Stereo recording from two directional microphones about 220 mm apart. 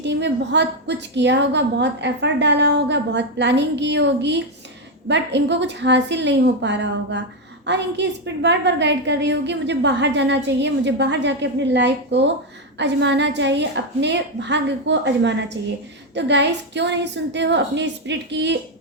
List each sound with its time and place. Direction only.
0.0 s a woman's voice: 50° right (ahead or behind)